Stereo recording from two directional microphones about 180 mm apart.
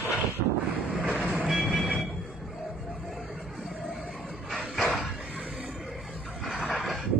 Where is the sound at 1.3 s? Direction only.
5° right (ahead or behind).